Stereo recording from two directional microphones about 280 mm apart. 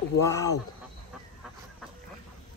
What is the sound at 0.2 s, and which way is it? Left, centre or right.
Speech, centre.